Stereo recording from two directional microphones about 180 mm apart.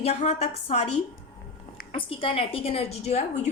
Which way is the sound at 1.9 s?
30° left (ahead or behind).